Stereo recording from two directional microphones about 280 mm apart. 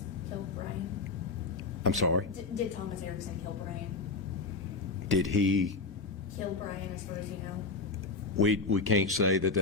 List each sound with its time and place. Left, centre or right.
1.8 s speech: right
5.0 s a man's voice: right
8.4 s a man's voice: right